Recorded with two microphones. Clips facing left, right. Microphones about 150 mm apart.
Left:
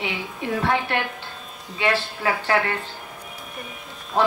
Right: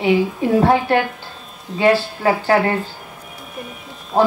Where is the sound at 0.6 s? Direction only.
40° right (ahead or behind).